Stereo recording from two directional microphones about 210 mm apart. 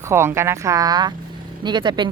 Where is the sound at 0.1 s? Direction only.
10° right (ahead or behind).